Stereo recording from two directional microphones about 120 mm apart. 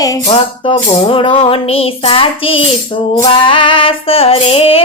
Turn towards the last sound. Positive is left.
turn(degrees=55)  # may be behind; listen again after turning